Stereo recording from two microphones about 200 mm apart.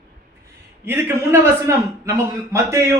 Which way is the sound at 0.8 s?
15° right (ahead or behind).